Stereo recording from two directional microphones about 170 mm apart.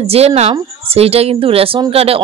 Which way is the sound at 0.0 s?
35° right (ahead or behind).